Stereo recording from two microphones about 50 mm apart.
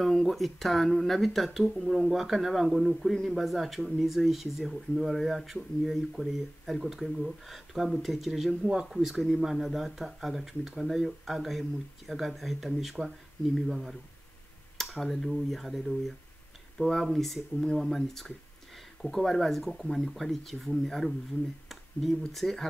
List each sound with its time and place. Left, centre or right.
0.0 s speech: centre
22.3 s speech: centre